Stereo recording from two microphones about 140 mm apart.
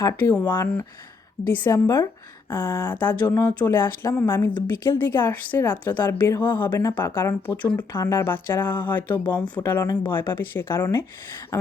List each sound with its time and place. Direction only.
0.0 s speech: 25° left (ahead or behind)
0.3 s speech: 15° left (ahead or behind)